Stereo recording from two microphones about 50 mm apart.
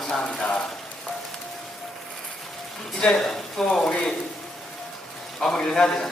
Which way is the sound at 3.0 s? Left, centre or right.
Centre.